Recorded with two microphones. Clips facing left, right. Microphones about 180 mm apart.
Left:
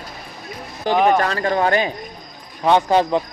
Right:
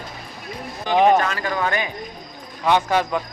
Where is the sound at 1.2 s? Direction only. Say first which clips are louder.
Left 5 dB; 35° left (ahead or behind).